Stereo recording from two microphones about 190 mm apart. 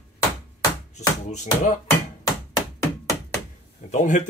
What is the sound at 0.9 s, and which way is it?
Speech, 35° left (ahead or behind).